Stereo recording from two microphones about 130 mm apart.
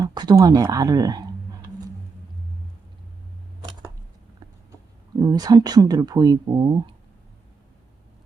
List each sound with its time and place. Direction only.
0.0 s speech: 35° right (ahead or behind)
5.2 s speech: 30° right (ahead or behind)